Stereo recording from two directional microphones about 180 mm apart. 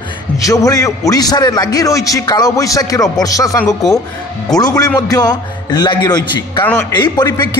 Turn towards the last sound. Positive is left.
turn(degrees=25)  # may be behind; listen again after turning